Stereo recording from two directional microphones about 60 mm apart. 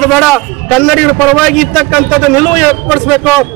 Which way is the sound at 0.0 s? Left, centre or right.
Centre.